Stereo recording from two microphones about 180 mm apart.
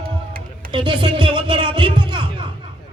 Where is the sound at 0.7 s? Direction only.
25° right (ahead or behind).